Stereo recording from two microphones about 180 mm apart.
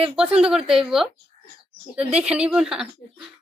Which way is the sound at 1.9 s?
5° right (ahead or behind).